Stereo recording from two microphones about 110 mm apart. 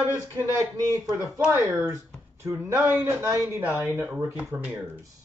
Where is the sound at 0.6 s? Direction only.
25° right (ahead or behind).